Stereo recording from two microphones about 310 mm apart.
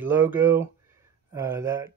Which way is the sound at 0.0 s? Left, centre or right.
Centre.